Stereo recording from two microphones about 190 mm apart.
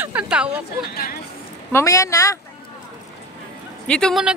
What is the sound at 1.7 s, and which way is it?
Speech, 15° left (ahead or behind).